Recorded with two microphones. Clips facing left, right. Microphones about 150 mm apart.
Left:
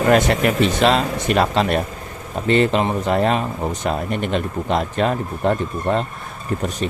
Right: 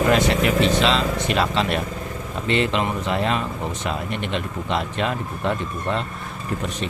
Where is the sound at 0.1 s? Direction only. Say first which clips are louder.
Left 3 dB; 50° left (ahead or behind).